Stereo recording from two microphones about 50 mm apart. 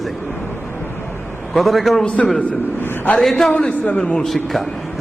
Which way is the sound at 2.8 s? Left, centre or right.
Left.